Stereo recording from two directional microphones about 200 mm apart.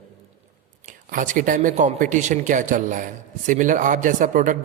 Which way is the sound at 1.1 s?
40° right (ahead or behind).